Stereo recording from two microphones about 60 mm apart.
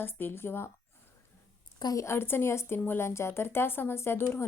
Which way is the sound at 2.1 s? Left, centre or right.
Left.